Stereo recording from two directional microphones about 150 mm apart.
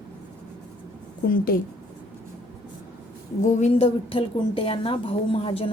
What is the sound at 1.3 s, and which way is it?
Speech, 75° left (ahead or behind).